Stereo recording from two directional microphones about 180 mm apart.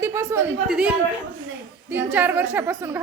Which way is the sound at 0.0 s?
15° right (ahead or behind).